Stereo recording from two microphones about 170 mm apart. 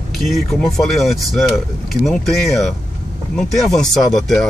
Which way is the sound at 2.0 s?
Centre (ahead or behind).